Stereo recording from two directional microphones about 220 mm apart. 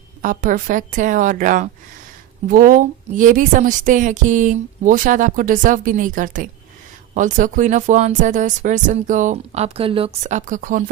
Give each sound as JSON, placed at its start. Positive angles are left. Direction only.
{"t": 0.2, "sound": "a woman's voice", "side_deg": -35}